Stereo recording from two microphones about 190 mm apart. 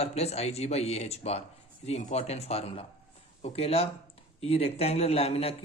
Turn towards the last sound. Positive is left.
turn(degrees=30)  # may be behind; listen again after turning